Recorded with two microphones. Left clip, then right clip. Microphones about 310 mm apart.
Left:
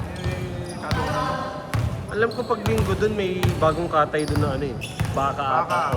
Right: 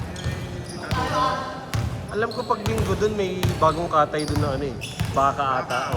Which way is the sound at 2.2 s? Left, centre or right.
Centre.